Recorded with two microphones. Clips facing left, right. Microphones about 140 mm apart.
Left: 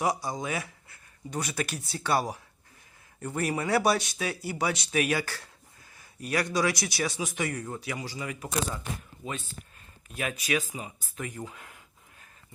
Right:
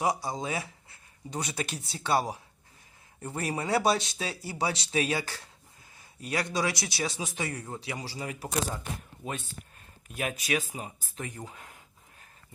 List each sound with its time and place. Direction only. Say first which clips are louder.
0.0 s a man's voice: even; 25° right (ahead or behind)
10.2 s speech: left 1 dB; 45° right (ahead or behind)